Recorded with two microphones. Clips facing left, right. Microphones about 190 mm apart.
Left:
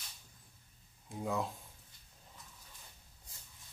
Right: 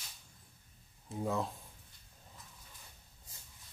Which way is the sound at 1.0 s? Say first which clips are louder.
Right 1 dB; centre (ahead or behind).